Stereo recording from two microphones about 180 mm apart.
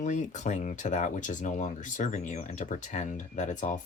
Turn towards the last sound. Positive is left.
turn(degrees=40)  # may be behind; listen again after turning